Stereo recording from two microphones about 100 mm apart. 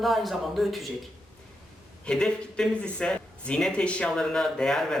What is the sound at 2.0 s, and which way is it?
Speech, 10° left (ahead or behind).